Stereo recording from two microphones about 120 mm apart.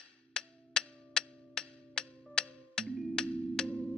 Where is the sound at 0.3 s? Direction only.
5° left (ahead or behind).